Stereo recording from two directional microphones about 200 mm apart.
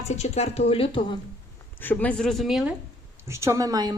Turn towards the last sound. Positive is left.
turn(degrees=-20)  # may be behind; listen again after turning